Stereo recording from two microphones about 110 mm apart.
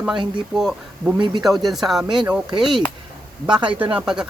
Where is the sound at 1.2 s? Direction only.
40° right (ahead or behind).